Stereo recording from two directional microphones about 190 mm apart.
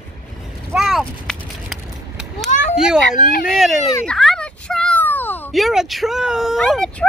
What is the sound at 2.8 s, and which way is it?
Speech, 5° right (ahead or behind).